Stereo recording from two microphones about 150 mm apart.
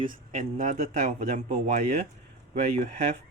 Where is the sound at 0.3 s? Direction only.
55° right (ahead or behind).